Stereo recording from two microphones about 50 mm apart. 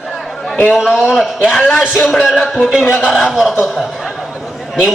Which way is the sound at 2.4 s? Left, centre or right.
Centre.